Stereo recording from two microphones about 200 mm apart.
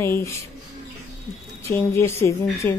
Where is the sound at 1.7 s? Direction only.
15° left (ahead or behind).